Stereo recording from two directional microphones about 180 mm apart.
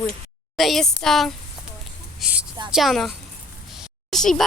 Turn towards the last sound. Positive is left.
turn(degrees=0)  # may be behind; listen again after turning